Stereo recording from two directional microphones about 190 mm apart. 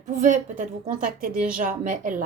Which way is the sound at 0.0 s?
40° right (ahead or behind).